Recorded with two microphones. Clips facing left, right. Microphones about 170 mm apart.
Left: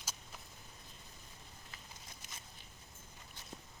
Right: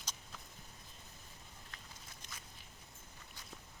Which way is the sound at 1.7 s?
5° left (ahead or behind).